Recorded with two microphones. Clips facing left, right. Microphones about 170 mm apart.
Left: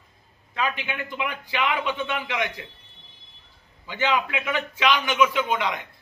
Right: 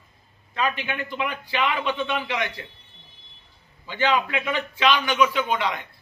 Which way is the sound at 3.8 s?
15° left (ahead or behind).